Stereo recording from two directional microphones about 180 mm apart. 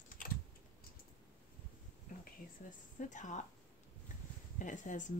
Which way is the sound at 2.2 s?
45° left (ahead or behind).